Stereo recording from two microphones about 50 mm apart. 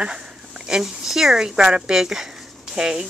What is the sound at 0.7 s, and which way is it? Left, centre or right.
Speech, centre.